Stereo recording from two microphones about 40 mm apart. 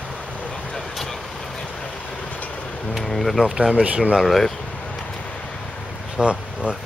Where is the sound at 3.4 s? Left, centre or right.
Centre.